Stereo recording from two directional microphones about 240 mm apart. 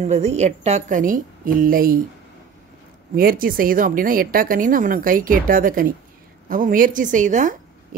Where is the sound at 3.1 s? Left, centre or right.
Right.